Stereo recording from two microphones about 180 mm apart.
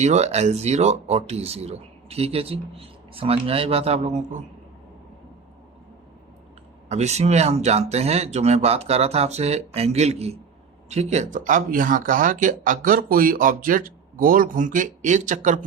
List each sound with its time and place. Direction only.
0.0 s speech: 40° right (ahead or behind)
6.8 s speech: 40° right (ahead or behind)